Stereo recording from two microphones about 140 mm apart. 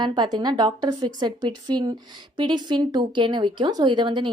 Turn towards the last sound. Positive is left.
turn(degrees=-35)  # may be behind; listen again after turning